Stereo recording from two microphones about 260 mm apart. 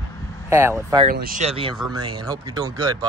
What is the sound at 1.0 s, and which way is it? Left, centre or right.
Speech, right.